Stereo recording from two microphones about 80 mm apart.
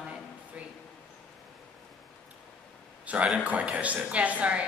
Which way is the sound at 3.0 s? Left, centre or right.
Centre.